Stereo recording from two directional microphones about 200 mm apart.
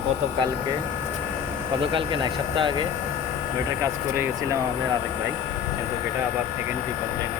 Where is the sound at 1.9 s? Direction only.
25° right (ahead or behind).